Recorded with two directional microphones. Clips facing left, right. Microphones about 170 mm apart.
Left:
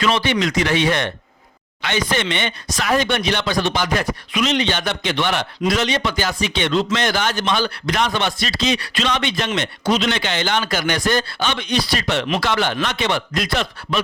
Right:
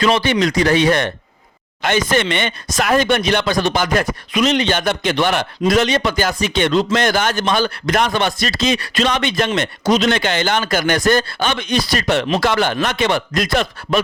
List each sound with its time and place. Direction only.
0.0 s speech: 40° right (ahead or behind)